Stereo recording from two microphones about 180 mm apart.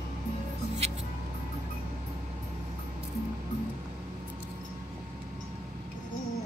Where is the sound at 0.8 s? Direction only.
35° right (ahead or behind).